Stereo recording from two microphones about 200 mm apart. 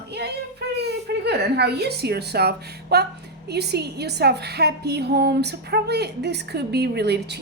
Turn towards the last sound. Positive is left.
turn(degrees=-55)  # may be behind; listen again after turning